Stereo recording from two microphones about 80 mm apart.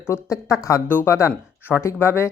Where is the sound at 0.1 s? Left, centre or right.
Left.